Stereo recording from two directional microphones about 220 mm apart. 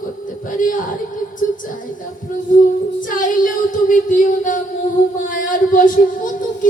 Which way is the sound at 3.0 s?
40° left (ahead or behind).